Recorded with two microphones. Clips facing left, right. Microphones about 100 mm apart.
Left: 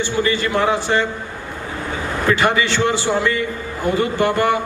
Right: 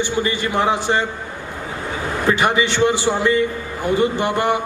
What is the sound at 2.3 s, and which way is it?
A man's voice, 20° right (ahead or behind).